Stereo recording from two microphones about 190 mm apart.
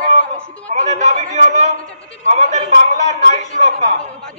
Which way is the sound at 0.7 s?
40° right (ahead or behind).